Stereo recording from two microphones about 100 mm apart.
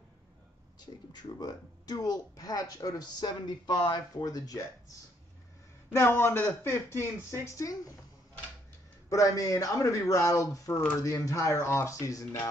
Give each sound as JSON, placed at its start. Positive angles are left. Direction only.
{"t": 0.7, "sound": "speech", "side_deg": 45}
{"t": 5.9, "sound": "a man's voice", "side_deg": 25}
{"t": 9.1, "sound": "speech", "side_deg": 35}